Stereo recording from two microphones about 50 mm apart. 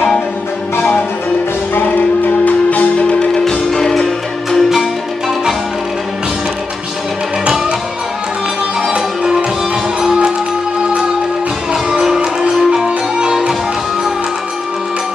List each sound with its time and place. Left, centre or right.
2.2 s music: left
3.7 s music: centre
8.8 s music: centre
11.9 s music: centre